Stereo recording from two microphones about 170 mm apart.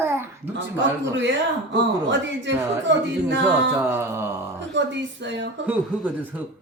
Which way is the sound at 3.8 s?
15° right (ahead or behind).